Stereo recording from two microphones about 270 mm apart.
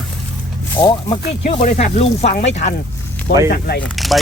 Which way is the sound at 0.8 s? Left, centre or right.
Centre.